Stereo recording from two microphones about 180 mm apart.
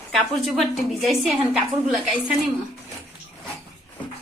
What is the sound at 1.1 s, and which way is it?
A woman's voice, centre (ahead or behind).